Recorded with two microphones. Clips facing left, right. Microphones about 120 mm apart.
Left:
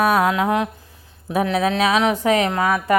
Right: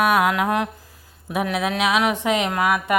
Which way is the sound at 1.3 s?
10° right (ahead or behind).